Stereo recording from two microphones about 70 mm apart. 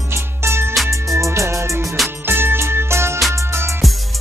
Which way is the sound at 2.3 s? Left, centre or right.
Right.